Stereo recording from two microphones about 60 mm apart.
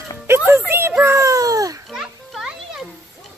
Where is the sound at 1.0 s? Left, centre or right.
Right.